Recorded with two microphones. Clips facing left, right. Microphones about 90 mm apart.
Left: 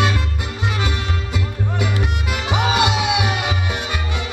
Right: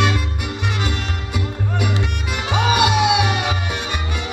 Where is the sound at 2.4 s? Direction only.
20° left (ahead or behind).